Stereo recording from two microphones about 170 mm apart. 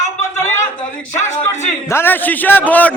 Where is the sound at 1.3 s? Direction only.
45° left (ahead or behind).